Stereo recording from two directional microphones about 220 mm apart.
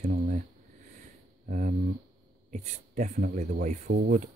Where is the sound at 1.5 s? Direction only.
35° right (ahead or behind).